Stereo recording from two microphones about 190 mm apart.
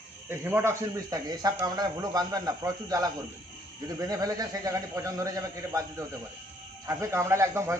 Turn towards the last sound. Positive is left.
turn(degrees=-15)  # may be behind; listen again after turning